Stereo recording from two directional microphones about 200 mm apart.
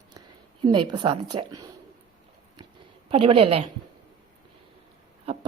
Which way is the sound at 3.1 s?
30° right (ahead or behind).